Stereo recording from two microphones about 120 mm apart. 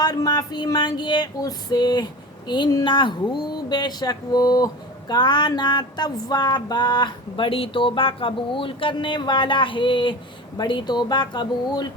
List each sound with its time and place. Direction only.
0.0 s speech: 35° left (ahead or behind)